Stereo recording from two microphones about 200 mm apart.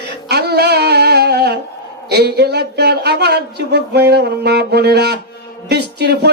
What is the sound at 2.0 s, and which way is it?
Speech, 55° right (ahead or behind).